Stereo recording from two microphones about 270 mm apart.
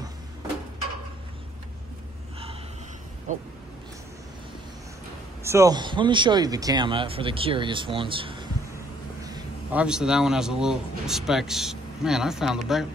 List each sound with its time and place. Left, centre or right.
3.3 s speech: right
5.4 s a man's voice: centre